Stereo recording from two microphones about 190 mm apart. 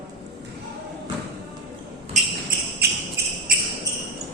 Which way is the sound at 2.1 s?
50° right (ahead or behind).